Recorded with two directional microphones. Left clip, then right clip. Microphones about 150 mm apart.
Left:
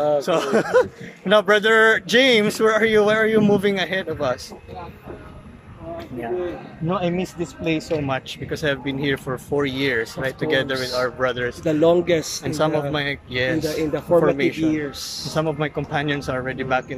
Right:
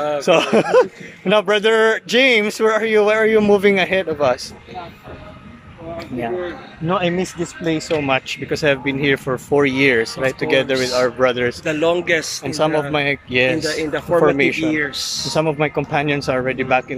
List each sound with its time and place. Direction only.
0.2 s speech: 10° right (ahead or behind)
6.9 s speech: 5° right (ahead or behind)
11.6 s speech: 25° left (ahead or behind)
12.4 s speech: 10° right (ahead or behind)
13.7 s speech: 15° left (ahead or behind)
14.3 s speech: 5° right (ahead or behind)
14.6 s speech: 15° left (ahead or behind)
15.3 s speech: 5° right (ahead or behind)